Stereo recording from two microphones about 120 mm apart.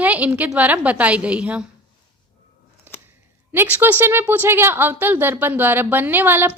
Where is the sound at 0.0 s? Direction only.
15° right (ahead or behind).